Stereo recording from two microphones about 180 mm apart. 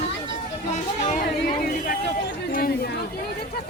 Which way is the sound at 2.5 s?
55° left (ahead or behind).